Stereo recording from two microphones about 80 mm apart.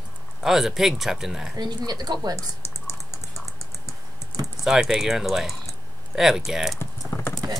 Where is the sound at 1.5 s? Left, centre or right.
Right.